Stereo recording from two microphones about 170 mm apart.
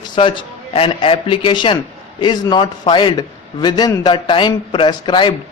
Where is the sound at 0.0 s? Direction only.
30° left (ahead or behind).